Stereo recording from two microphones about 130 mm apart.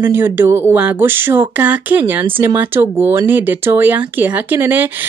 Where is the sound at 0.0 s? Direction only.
15° right (ahead or behind).